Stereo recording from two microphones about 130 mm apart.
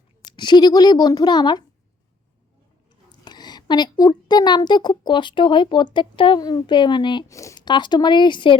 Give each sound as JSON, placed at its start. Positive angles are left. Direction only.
{"t": 0.3, "sound": "a woman's voice", "side_deg": 35}
{"t": 3.1, "sound": "a woman's voice", "side_deg": 35}
{"t": 7.3, "sound": "a woman's voice", "side_deg": 25}